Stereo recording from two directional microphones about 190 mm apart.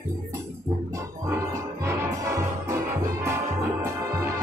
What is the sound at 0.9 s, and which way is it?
Music, 15° right (ahead or behind).